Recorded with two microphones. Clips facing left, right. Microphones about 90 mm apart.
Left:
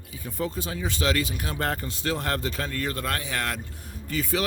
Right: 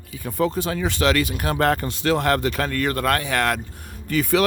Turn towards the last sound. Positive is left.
turn(degrees=-65)  # may be behind; listen again after turning